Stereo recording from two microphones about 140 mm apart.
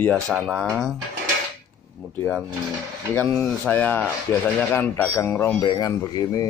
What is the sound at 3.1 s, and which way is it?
Speech, 5° left (ahead or behind).